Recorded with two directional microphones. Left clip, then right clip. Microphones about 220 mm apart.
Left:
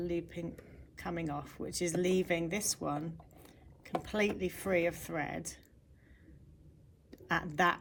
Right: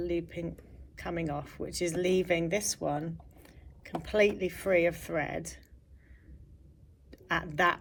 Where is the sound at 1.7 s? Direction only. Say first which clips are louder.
Right 2 dB; 10° left (ahead or behind).